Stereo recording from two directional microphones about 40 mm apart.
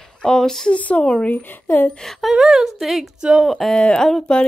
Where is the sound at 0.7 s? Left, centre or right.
Left.